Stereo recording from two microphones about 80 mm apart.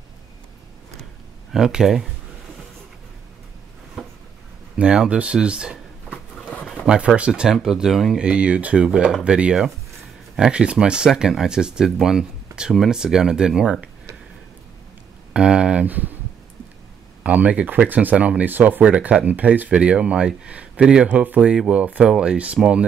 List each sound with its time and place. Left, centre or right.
1.5 s speech: centre
4.0 s a sound: centre
4.7 s speech: centre
7.2 s speech: centre
15.3 s speech: centre
17.2 s speech: centre